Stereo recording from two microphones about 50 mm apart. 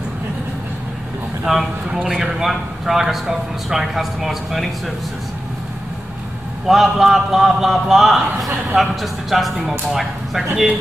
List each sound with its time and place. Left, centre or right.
1.4 s a man's voice: centre
6.7 s a man's voice: centre